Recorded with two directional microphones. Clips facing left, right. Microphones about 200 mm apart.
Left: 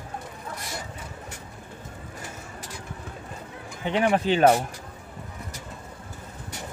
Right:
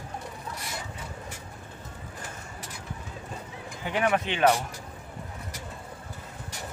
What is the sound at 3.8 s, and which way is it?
Speech, 30° left (ahead or behind).